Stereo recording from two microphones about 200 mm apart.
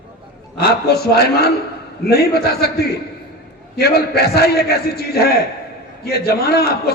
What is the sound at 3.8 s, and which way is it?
A man's voice, 50° left (ahead or behind).